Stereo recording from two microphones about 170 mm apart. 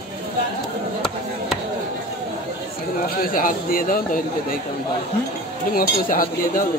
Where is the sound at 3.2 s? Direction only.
55° left (ahead or behind).